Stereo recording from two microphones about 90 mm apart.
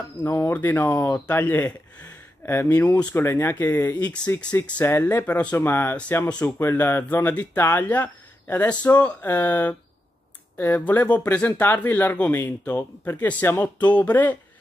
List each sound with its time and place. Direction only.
0.2 s speech: 30° left (ahead or behind)